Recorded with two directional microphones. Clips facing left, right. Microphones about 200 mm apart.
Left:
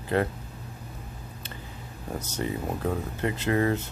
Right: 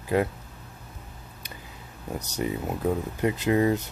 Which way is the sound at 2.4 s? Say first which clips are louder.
Right 2 dB; 15° right (ahead or behind).